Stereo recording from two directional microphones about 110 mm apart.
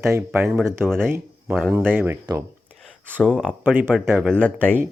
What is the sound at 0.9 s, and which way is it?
Speech, 5° left (ahead or behind).